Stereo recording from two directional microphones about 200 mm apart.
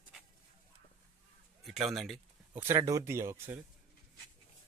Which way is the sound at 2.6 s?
15° right (ahead or behind).